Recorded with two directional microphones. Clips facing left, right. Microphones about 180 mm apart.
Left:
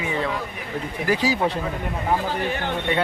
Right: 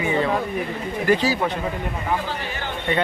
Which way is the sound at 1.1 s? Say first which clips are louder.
Right 2 dB; 10° left (ahead or behind).